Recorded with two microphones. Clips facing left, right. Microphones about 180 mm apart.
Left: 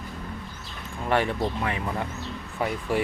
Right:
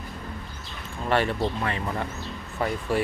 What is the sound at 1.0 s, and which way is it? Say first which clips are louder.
Speech: even; 15° left (ahead or behind).